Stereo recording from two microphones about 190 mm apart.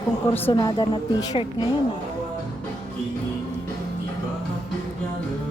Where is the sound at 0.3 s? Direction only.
15° left (ahead or behind).